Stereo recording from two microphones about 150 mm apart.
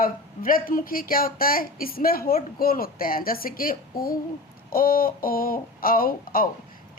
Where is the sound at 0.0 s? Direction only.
70° left (ahead or behind).